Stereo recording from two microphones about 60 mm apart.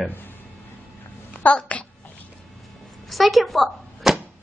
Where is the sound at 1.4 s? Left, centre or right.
Centre.